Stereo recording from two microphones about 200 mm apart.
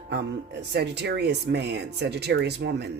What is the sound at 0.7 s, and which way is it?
Speech, 55° right (ahead or behind).